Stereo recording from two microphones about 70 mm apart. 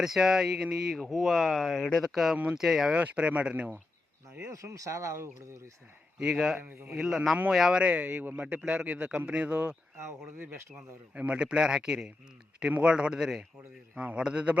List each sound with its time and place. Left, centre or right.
0.0 s speech: centre
2.3 s a man's voice: right
2.6 s speech: centre
2.9 s a man's voice: centre
4.5 s speech: right
6.1 s a man's voice: centre
6.6 s speech: right
6.9 s a man's voice: centre
7.8 s a man's voice: centre
10.1 s speech: right
11.1 s a man's voice: centre